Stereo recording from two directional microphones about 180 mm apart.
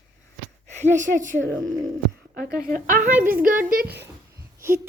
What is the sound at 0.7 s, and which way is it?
Speech, 40° right (ahead or behind).